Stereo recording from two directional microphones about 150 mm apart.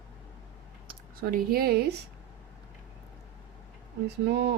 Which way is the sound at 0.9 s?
75° right (ahead or behind).